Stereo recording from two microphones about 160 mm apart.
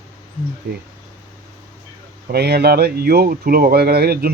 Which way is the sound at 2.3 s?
85° right.